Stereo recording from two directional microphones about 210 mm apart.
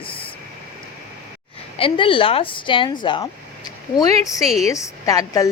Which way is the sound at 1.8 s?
25° left (ahead or behind).